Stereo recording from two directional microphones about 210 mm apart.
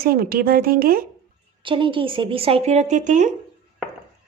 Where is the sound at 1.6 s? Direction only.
25° right (ahead or behind).